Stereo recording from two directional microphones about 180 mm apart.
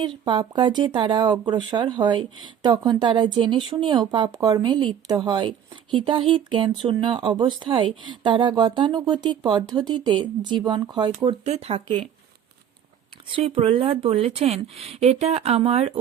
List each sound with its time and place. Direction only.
0.3 s speech: 25° right (ahead or behind)
13.3 s a woman's voice: 30° right (ahead or behind)